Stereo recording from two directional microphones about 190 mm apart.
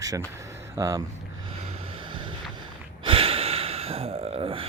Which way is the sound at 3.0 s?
30° right (ahead or behind).